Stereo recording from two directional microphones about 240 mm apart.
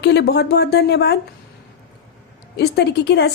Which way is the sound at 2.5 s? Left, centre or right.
Left.